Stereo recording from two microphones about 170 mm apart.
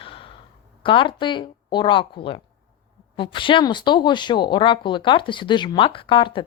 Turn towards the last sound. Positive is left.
turn(degrees=30)  # may be behind; listen again after turning